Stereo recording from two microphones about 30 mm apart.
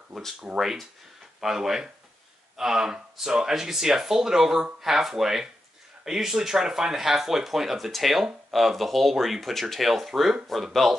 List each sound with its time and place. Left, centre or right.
0.5 s speech: right
1.4 s speech: centre
9.5 s speech: centre
9.8 s speech: centre
10.8 s speech: centre